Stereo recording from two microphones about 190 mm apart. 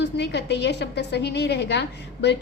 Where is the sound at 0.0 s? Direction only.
65° left (ahead or behind).